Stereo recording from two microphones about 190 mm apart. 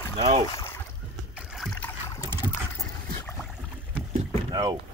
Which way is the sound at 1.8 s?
15° left (ahead or behind).